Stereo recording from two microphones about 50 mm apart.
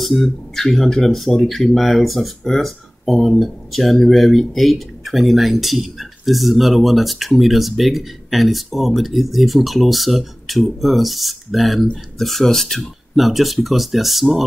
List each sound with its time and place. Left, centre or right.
0.0 s speech: centre